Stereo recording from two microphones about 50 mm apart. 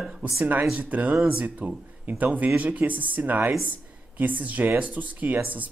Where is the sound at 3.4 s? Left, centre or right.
Right.